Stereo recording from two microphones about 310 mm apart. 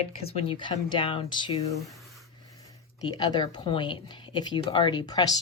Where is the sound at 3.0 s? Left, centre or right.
Centre.